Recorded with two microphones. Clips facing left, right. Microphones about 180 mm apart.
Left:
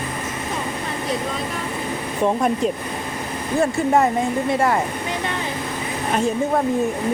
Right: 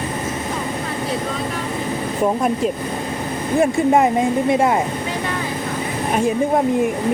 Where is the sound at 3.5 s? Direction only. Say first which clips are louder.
Right 3 dB; 15° right (ahead or behind).